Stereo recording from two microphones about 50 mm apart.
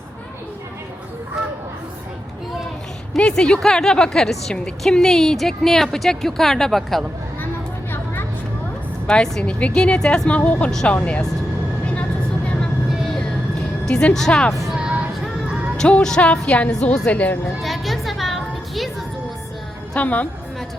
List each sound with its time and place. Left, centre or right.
3.2 s a woman's voice: centre
9.0 s speech: centre
14.1 s a woman's voice: centre
14.8 s vehicle: right
15.8 s speech: centre
17.6 s a sound: centre
20.0 s a woman's voice: left